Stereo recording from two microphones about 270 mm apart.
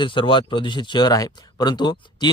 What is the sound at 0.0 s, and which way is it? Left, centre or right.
Speech, centre.